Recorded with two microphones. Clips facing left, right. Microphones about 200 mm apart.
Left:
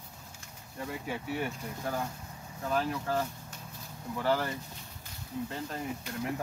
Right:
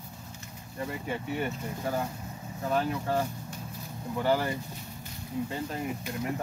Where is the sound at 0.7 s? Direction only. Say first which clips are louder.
Right 3 dB; centre (ahead or behind).